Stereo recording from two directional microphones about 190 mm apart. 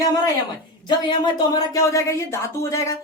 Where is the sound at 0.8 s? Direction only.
20° left (ahead or behind).